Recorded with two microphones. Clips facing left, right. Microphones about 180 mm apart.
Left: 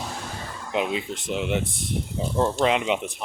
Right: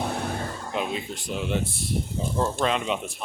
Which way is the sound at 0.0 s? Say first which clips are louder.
Right 6 dB; 60° right (ahead or behind).